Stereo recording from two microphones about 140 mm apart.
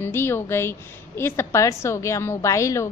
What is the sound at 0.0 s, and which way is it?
A woman's voice, 15° left (ahead or behind).